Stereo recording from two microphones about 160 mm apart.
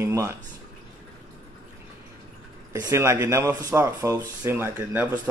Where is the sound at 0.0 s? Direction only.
20° right (ahead or behind).